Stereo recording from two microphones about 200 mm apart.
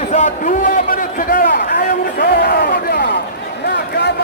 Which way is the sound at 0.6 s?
45° left (ahead or behind).